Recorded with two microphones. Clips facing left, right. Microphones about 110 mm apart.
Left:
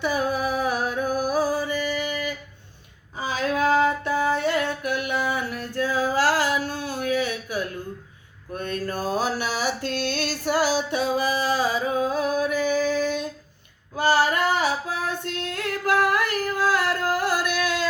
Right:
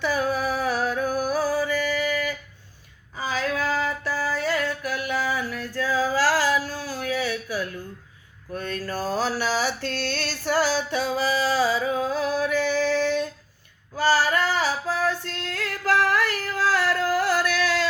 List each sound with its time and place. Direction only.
0.0 s music: 15° left (ahead or behind)
3.2 s a sound: 20° left (ahead or behind)
8.7 s a sound: 15° left (ahead or behind)
11.9 s music: 15° left (ahead or behind)
12.8 s female singing: 10° left (ahead or behind)
17.2 s music: 15° left (ahead or behind)